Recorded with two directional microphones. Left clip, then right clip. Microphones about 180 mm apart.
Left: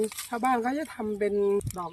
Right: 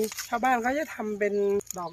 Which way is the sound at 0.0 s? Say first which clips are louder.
Right 1 dB; 30° right (ahead or behind).